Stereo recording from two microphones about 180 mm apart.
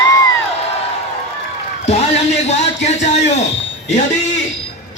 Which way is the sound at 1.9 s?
40° left (ahead or behind).